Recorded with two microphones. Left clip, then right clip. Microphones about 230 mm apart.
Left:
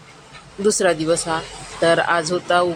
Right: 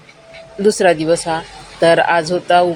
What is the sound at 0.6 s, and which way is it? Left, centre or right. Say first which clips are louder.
Speech: right 5 dB; centre.